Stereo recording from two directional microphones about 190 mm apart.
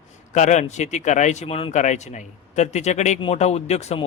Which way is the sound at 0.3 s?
40° left (ahead or behind).